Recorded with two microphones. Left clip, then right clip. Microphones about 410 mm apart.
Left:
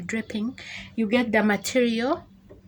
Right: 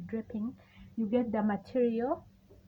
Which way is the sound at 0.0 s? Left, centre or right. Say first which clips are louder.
Left 9 dB; right.